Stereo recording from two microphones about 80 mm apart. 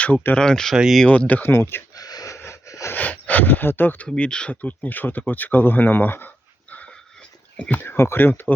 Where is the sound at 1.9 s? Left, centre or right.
Left.